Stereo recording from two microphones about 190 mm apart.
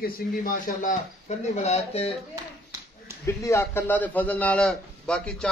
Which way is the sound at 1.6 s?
35° left (ahead or behind).